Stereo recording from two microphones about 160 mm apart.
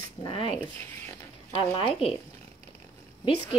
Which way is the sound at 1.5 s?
35° left (ahead or behind).